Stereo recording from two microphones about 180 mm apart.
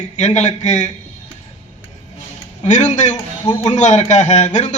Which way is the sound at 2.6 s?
40° left (ahead or behind).